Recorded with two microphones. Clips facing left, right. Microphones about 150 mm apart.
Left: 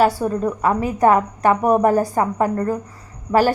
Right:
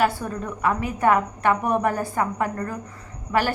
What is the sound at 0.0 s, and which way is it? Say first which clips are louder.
A woman's voice: left 6 dB; 35° left (ahead or behind).